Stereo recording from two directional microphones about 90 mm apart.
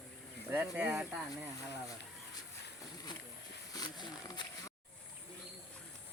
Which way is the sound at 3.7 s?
45° left (ahead or behind).